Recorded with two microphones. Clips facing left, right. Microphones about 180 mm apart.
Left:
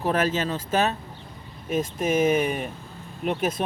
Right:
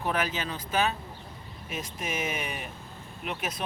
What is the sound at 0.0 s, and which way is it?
Speech, 40° left (ahead or behind).